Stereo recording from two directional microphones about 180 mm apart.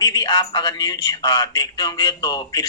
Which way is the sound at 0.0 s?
20° left (ahead or behind).